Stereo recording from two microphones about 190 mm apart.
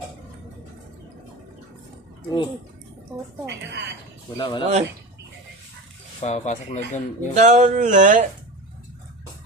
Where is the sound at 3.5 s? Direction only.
65° right (ahead or behind).